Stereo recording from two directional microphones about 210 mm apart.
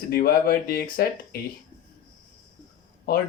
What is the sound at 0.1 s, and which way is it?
Speech, 45° left (ahead or behind).